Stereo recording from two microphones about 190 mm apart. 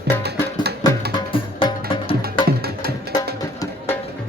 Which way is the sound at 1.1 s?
25° left (ahead or behind).